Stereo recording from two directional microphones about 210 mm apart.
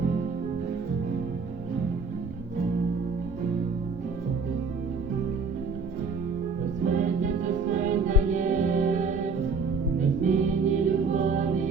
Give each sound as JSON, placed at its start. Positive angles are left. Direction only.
{"t": 6.8, "sound": "music", "side_deg": -35}